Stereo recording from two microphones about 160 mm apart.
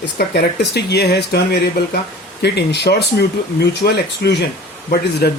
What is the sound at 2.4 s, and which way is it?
Speech, 90° left.